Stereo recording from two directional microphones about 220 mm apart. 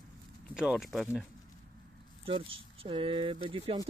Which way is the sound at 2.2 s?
25° right (ahead or behind).